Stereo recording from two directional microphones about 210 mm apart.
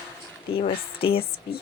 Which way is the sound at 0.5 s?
25° left (ahead or behind).